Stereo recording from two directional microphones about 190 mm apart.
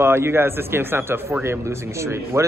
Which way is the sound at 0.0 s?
15° right (ahead or behind).